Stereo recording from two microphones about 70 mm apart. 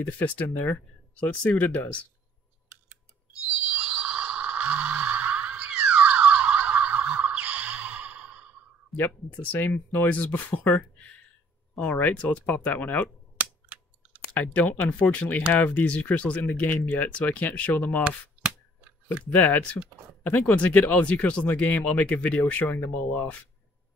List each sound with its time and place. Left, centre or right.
0.0 s speech: left
3.7 s scrape: centre
8.9 s speech: left
13.4 s scissors: centre
14.3 s speech: left
19.2 s speech: left